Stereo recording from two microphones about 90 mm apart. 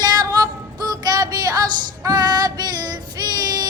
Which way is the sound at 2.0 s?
50° right (ahead or behind).